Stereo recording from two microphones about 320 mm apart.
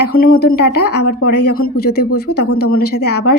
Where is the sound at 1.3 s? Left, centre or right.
Left.